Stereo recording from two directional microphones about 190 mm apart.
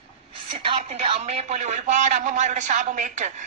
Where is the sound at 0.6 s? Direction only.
30° right (ahead or behind).